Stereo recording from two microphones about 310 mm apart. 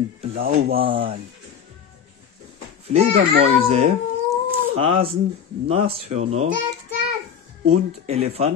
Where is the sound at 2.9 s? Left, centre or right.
Right.